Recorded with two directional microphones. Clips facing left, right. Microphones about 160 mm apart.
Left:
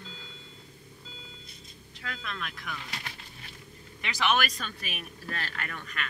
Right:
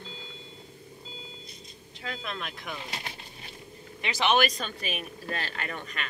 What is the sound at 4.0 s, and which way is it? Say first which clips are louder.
Speech: right 3 dB; 25° right (ahead or behind).